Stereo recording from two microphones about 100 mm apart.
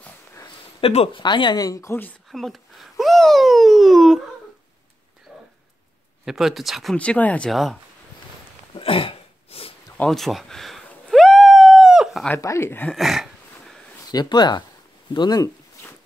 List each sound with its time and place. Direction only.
0.7 s speech: 70° left (ahead or behind)
1.2 s speech: 50° left (ahead or behind); by 2.0 s 35° left (ahead or behind)
2.2 s a child's voice: centre (ahead or behind)
5.3 s a sound: 5° right (ahead or behind)
6.2 s speech: 5° right (ahead or behind)
7.0 s speech: 15° left (ahead or behind)
7.5 s speech: centre (ahead or behind)
8.7 s throat clearing: 60° left (ahead or behind)
10.0 s a sound: centre (ahead or behind)
12.4 s speech: 30° left (ahead or behind)
12.9 s a sound: centre (ahead or behind)
14.1 s speech: 45° left (ahead or behind)